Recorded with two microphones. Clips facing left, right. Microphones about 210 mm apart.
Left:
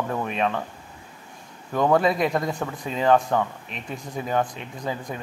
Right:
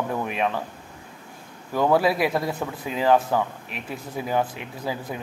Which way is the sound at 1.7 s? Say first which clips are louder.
Even; 5° right (ahead or behind).